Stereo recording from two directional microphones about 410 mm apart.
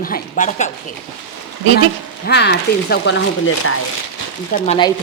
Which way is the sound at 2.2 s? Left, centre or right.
Left.